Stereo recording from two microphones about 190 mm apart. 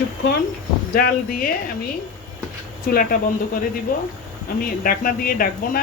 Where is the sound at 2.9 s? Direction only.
50° left (ahead or behind).